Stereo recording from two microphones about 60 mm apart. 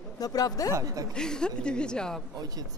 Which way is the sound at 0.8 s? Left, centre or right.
Right.